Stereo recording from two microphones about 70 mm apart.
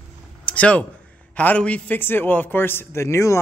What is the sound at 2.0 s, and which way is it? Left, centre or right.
Speech, left.